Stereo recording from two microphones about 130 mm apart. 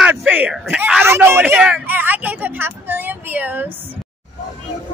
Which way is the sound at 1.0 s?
20° right (ahead or behind).